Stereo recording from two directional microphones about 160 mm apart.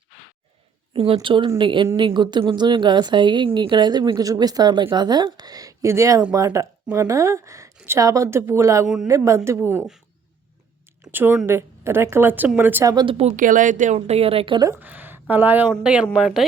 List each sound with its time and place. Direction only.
0.9 s a woman's voice: 35° right (ahead or behind); by 9.8 s 15° right (ahead or behind)
11.0 s a sound: 15° right (ahead or behind)
11.4 s a woman's voice: 15° right (ahead or behind)
12.9 s speech: 25° right (ahead or behind)
13.1 s speech: 50° right (ahead or behind); by 14.7 s 30° right (ahead or behind)
14.7 s speech: 10° right (ahead or behind)